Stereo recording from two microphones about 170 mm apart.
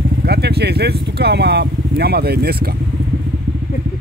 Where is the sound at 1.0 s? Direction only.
75° right (ahead or behind).